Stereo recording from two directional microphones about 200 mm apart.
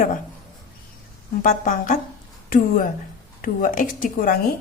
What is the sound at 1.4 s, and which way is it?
A woman's voice, 40° left (ahead or behind).